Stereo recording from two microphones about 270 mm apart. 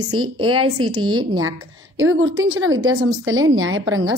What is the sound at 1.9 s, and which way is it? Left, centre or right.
A woman's voice, right.